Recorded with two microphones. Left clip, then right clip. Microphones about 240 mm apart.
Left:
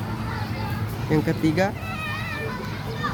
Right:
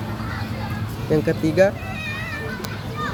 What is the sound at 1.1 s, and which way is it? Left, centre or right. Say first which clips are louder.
Speech: right 3 dB; centre.